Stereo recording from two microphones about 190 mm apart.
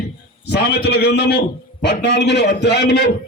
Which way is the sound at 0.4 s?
55° left (ahead or behind).